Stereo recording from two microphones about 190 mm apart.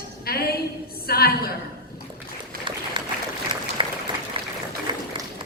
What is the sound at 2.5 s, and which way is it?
Applause, 50° right (ahead or behind).